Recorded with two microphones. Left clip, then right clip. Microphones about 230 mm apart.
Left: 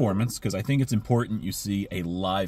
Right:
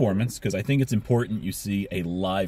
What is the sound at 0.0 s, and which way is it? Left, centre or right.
Speech, centre.